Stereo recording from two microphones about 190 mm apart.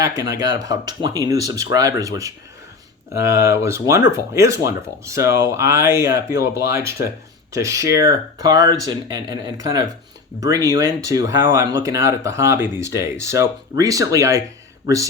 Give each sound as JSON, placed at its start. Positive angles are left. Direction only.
{"t": 0.2, "sound": "speech", "side_deg": -20}